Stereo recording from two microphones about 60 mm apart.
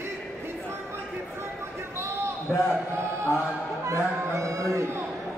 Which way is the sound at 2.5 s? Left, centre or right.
Centre.